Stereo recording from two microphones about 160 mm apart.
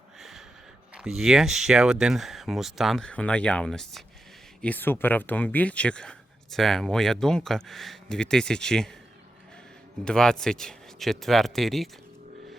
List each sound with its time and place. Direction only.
0.2 s a sound: centre (ahead or behind)
0.9 s speech: centre (ahead or behind)
10.0 s speech: 5° left (ahead or behind)